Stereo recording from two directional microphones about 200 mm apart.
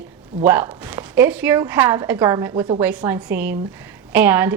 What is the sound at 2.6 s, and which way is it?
Speech, 25° right (ahead or behind).